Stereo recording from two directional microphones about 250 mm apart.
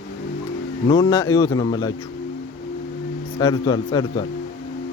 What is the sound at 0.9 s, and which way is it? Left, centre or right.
Speech, centre.